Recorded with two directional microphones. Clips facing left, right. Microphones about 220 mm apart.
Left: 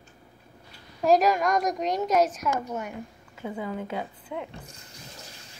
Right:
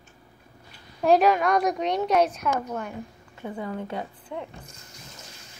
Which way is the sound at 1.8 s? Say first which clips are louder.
Right 1 dB; 40° left (ahead or behind).